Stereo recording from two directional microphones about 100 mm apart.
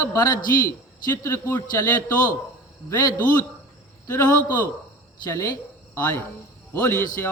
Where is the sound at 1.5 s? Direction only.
20° left (ahead or behind).